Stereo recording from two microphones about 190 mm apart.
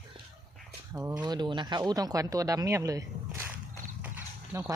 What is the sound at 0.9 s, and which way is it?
Speech, 15° right (ahead or behind).